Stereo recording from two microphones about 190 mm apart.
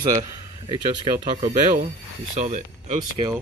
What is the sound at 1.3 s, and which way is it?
Speech, 40° right (ahead or behind).